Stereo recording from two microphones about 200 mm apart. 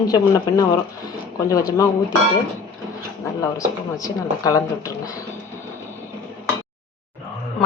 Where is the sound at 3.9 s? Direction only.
15° left (ahead or behind).